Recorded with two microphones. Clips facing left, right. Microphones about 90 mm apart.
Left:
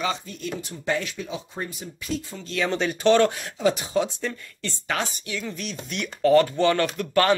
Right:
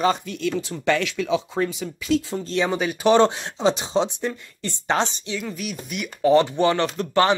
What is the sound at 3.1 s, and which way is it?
Speech, 25° right (ahead or behind).